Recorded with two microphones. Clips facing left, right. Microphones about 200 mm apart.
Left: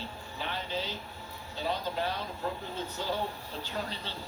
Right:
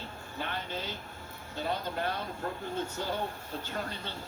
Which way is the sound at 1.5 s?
50° right (ahead or behind).